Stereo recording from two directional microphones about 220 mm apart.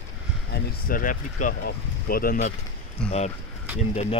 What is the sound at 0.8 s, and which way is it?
Speech, 40° left (ahead or behind).